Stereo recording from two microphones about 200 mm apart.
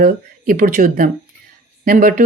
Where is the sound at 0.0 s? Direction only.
45° right (ahead or behind).